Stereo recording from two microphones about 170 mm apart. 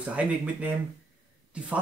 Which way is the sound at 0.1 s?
10° right (ahead or behind).